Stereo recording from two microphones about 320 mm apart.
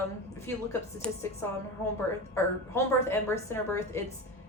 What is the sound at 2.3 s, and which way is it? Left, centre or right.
A woman's voice, centre.